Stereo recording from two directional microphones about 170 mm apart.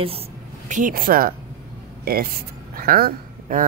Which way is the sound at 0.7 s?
50° right (ahead or behind).